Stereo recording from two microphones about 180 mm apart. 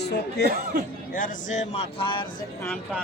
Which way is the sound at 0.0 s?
65° left (ahead or behind).